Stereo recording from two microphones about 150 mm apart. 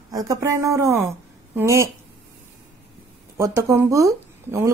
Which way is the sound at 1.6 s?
20° right (ahead or behind).